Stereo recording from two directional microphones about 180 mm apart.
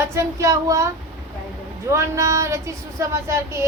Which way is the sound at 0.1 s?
15° right (ahead or behind).